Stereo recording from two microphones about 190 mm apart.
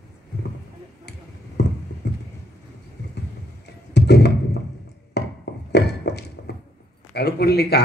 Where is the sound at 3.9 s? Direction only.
60° left (ahead or behind).